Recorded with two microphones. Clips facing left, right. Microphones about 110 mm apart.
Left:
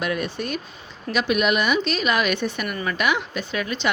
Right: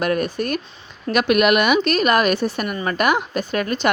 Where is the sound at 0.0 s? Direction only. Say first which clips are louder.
Right 5 dB; 45° right (ahead or behind).